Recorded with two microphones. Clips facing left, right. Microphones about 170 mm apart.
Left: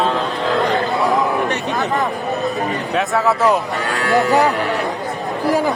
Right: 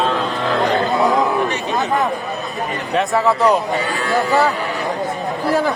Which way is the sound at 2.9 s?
Centre (ahead or behind).